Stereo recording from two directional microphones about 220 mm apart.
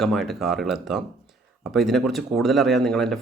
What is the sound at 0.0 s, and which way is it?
Speech, centre (ahead or behind).